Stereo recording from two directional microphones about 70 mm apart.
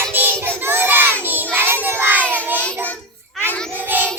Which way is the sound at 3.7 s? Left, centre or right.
Right.